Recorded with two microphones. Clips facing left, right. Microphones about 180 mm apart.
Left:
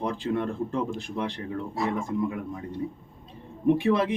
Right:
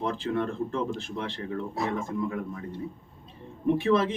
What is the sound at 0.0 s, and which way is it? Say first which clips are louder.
Speech: left 1 dB; 15° left (ahead or behind).